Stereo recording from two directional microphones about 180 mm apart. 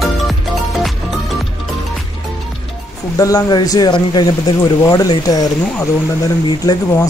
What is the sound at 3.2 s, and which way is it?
Speech, 20° left (ahead or behind).